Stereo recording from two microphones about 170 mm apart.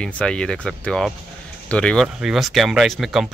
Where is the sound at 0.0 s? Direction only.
5° left (ahead or behind).